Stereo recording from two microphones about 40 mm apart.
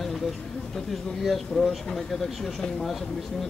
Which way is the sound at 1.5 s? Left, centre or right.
Centre.